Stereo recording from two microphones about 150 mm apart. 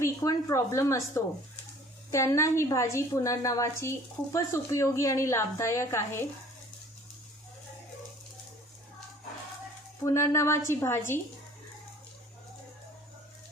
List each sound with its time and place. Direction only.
0.0 s a woman's voice: 20° left (ahead or behind)
10.0 s a woman's voice: 20° left (ahead or behind)